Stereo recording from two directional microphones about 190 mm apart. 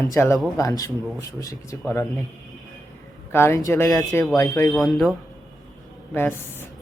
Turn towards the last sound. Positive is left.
turn(degrees=10)  # may be behind; listen again after turning